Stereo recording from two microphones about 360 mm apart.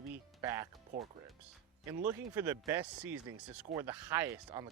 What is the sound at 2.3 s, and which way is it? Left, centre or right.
Speech, centre.